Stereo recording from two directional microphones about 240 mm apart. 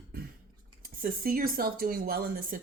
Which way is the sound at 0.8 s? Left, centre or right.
Right.